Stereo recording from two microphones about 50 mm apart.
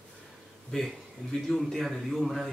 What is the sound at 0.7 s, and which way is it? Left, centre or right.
Speech, centre.